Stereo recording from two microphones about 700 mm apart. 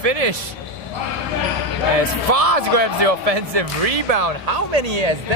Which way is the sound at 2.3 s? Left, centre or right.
Right.